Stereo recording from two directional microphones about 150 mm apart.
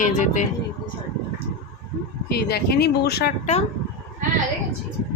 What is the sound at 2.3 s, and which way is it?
Speech, 90° left.